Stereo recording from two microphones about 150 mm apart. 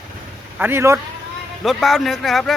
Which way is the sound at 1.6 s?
Centre (ahead or behind).